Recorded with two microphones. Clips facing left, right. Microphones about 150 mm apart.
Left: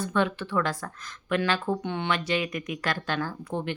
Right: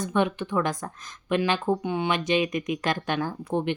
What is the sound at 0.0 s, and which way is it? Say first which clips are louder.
Speech: right 2 dB; 15° right (ahead or behind).